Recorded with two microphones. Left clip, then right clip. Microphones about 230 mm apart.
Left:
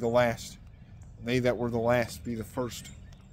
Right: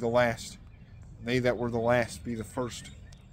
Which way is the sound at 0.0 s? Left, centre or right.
Centre.